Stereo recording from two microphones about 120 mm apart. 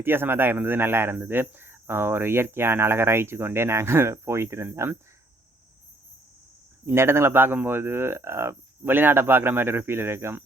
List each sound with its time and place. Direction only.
0.0 s speech: 20° right (ahead or behind)
6.8 s speech: 20° right (ahead or behind)